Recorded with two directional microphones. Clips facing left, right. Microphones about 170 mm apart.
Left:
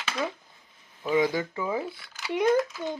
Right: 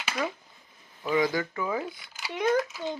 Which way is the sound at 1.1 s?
25° left (ahead or behind).